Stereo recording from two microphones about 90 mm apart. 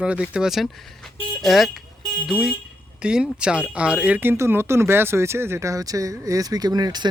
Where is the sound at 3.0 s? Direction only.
10° right (ahead or behind).